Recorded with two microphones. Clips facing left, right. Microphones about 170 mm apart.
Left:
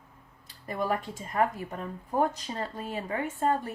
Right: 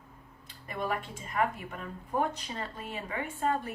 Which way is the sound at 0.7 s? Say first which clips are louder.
Left 4 dB; 40° left (ahead or behind).